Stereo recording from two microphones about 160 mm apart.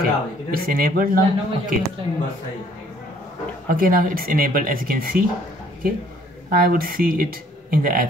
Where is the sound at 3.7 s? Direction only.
60° right (ahead or behind).